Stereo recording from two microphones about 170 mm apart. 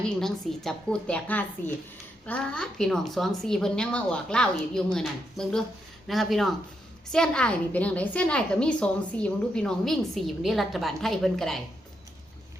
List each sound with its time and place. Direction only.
0.1 s a woman's voice: centre (ahead or behind)